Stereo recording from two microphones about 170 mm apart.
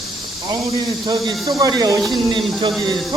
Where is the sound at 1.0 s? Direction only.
25° right (ahead or behind).